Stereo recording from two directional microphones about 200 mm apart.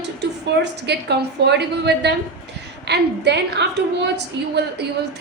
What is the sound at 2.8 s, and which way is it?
A woman's voice, 60° right (ahead or behind).